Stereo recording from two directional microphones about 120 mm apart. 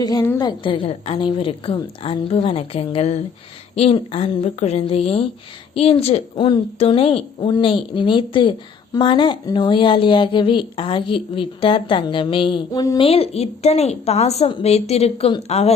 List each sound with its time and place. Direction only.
0.0 s a woman's voice: 35° left (ahead or behind); by 6.2 s 55° left (ahead or behind)
6.3 s a woman's voice: 40° left (ahead or behind)
6.7 s a woman's voice: 55° left (ahead or behind)
13.0 s a woman's voice: 55° left (ahead or behind)